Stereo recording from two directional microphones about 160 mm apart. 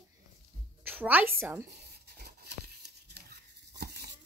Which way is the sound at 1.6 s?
85° right.